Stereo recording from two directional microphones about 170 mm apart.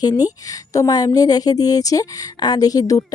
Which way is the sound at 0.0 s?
25° left (ahead or behind).